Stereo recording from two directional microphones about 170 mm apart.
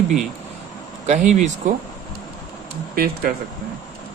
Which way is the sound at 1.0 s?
45° right (ahead or behind).